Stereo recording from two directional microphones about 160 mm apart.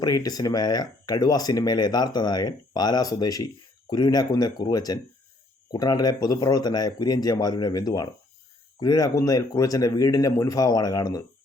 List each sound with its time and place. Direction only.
0.0 s speech: 25° left (ahead or behind)